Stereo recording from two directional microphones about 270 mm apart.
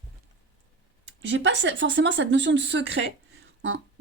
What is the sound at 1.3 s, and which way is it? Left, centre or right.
Speech, right.